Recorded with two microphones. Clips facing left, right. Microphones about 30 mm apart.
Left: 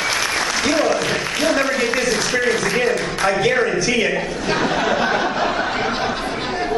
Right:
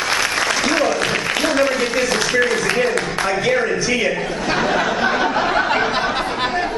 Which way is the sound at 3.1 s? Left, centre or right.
Centre.